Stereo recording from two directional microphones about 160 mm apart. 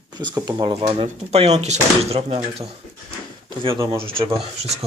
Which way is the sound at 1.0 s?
40° right (ahead or behind).